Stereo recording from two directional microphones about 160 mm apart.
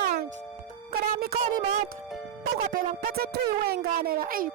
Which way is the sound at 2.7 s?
65° right (ahead or behind).